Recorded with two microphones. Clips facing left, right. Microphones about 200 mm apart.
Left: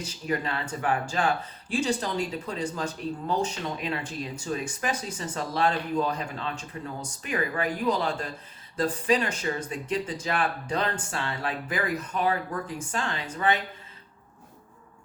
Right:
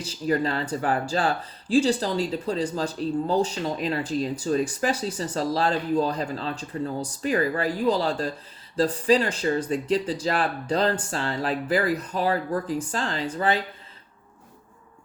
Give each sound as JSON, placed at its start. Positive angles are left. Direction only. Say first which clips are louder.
{"t": 0.0, "sound": "speech", "louder": "right 6 dB", "side_deg": -35}